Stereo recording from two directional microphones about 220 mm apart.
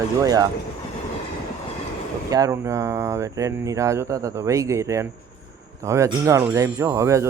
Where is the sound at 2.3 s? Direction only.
15° right (ahead or behind).